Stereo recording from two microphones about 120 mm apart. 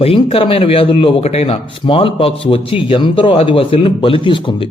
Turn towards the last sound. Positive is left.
turn(degrees=45)  # may be behind; listen again after turning